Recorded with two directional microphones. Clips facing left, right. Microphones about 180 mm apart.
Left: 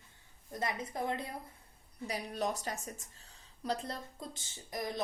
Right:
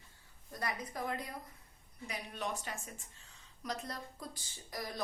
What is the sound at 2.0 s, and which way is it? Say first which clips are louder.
Speech: left 5 dB; 35° left (ahead or behind).